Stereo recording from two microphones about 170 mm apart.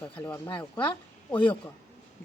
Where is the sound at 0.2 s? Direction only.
20° left (ahead or behind).